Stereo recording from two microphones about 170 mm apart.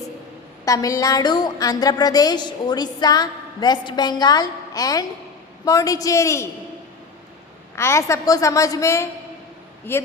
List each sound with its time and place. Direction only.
0.6 s a woman's voice: 20° left (ahead or behind)
7.8 s a woman's voice: 15° left (ahead or behind)